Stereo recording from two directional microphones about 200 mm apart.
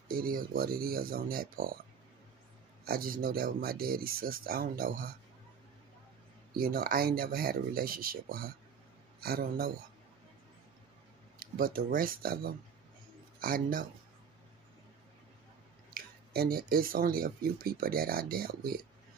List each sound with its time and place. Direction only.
0.1 s speech: 45° right (ahead or behind)
2.8 s speech: 45° right (ahead or behind)
6.5 s speech: 45° right (ahead or behind)
11.3 s speech: 45° right (ahead or behind)
15.9 s speech: 50° right (ahead or behind)